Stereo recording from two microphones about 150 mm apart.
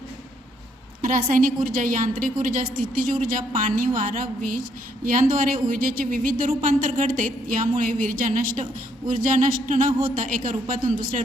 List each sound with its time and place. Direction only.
1.0 s a woman's voice: 65° right (ahead or behind)